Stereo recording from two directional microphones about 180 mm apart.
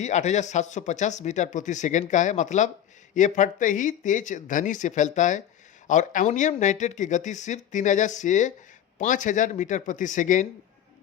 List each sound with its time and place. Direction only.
0.0 s speech: 40° left (ahead or behind)